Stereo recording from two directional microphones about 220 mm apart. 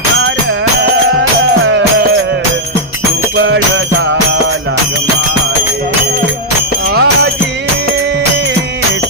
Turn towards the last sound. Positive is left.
turn(degrees=-50)  # may be behind; listen again after turning